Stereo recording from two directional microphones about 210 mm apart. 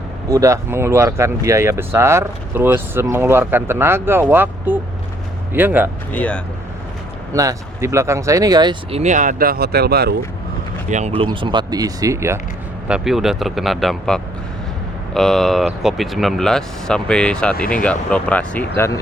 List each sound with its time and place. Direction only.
0.3 s speech: 15° right (ahead or behind)
6.1 s speech: 5° left (ahead or behind)
7.3 s speech: 15° right (ahead or behind); by 10.2 s 50° right (ahead or behind)
10.8 s speech: 35° right (ahead or behind); by 12.4 s 15° right (ahead or behind)
12.9 s speech: centre (ahead or behind)